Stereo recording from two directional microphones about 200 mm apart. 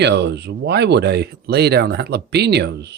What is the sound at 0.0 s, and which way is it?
Speech, 55° right (ahead or behind).